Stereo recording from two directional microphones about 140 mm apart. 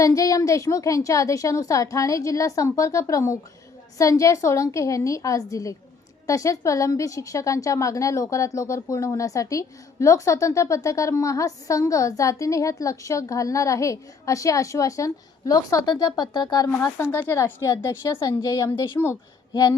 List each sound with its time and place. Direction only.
0.0 s a woman's voice: 25° left (ahead or behind)
16.7 s a woman's voice: 20° left (ahead or behind)